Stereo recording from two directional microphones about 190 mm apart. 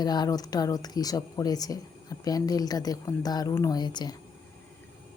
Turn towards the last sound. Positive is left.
turn(degrees=20)  # may be behind; listen again after turning